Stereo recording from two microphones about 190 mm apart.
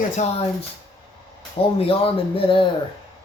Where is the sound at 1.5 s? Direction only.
30° left (ahead or behind).